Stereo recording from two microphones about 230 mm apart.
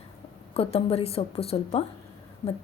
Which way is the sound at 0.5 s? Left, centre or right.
Left.